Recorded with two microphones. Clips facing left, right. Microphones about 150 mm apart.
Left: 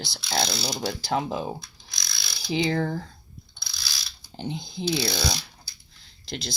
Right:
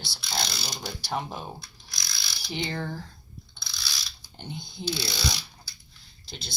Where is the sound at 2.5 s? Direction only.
90° left.